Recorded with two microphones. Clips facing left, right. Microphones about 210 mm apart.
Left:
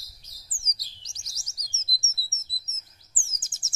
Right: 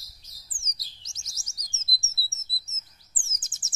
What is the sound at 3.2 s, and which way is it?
Chirp, 20° right (ahead or behind).